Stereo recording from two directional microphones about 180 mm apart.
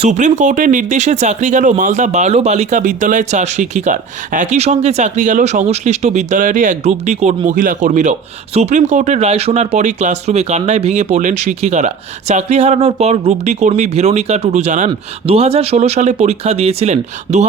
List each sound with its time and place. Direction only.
0.0 s speech: 40° right (ahead or behind)